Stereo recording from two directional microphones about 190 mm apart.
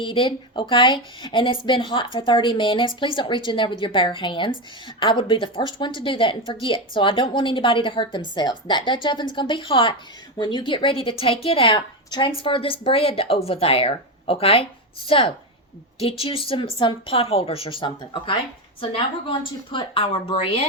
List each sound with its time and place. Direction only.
0.0 s a woman's voice: 25° left (ahead or behind)